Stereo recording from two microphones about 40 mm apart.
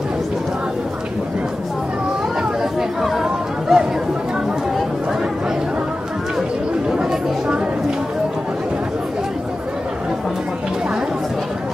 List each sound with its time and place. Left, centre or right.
2.6 s chatter: centre
6.9 s chatter: centre